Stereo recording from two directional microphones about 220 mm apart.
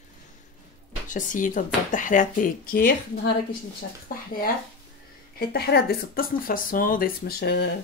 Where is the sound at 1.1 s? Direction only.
35° left (ahead or behind).